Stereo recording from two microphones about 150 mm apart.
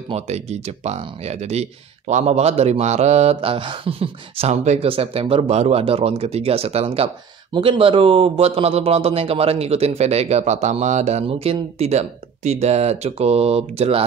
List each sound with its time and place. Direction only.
0.1 s a man's voice: 45° right (ahead or behind)